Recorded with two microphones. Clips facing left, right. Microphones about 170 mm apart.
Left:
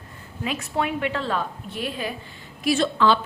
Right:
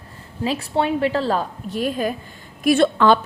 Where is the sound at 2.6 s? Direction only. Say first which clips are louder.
Right 5 dB; 55° right (ahead or behind).